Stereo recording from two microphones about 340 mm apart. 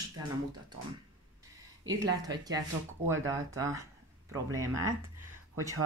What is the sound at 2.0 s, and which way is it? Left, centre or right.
Speech, centre.